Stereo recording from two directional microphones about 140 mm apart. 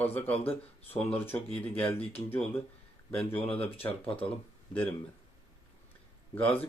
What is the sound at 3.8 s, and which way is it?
Speech, 25° left (ahead or behind).